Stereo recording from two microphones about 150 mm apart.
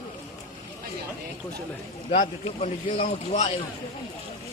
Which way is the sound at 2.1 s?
55° left (ahead or behind).